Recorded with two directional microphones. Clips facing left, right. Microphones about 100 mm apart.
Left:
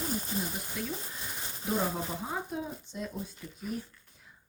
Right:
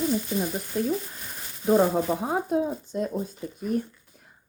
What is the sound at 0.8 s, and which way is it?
Speech, 40° right (ahead or behind).